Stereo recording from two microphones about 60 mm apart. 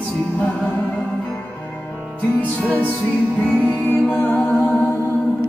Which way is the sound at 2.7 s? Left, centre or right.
Left.